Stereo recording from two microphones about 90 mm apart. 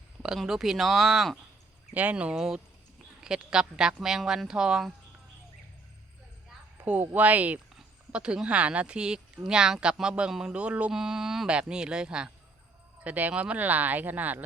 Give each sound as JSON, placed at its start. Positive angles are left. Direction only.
{"t": 0.2, "sound": "speech", "side_deg": -5}
{"t": 1.9, "sound": "speech", "side_deg": -15}
{"t": 6.8, "sound": "speech", "side_deg": -20}